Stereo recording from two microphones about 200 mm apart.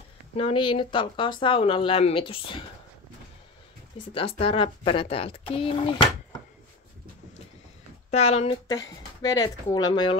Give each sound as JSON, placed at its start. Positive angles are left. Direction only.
{"t": 0.4, "sound": "speech", "side_deg": 25}
{"t": 4.1, "sound": "speech", "side_deg": 25}
{"t": 8.1, "sound": "speech", "side_deg": 30}
{"t": 8.6, "sound": "speech", "side_deg": 20}